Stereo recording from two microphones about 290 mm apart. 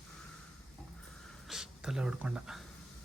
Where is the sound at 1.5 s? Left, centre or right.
Centre.